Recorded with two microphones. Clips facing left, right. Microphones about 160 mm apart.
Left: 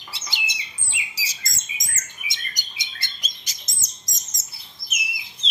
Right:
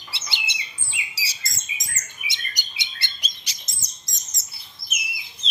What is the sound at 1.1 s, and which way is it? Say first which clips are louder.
Bird: even; 45° left (ahead or behind).